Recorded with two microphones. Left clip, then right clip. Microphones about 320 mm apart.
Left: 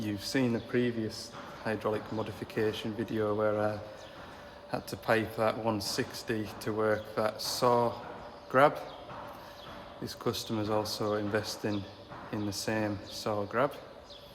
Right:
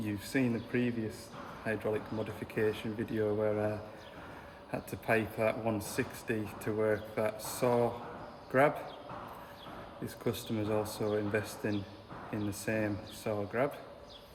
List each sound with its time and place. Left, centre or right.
0.0 s speech: centre
4.7 s speech: centre
10.0 s speech: centre